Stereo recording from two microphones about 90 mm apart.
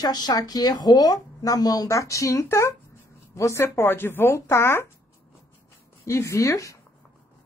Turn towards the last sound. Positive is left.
turn(degrees=35)  # may be behind; listen again after turning